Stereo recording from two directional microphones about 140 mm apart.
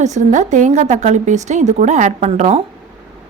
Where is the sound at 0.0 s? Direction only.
60° right (ahead or behind).